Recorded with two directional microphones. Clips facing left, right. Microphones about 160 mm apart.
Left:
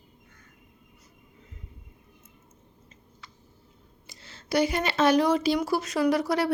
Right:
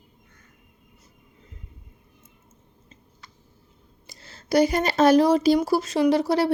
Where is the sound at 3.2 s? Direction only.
40° right (ahead or behind).